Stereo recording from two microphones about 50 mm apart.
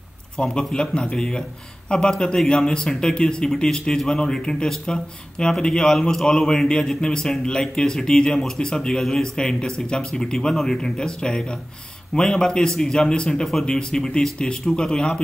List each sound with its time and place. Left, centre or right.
0.4 s speech: centre
13.5 s speech: centre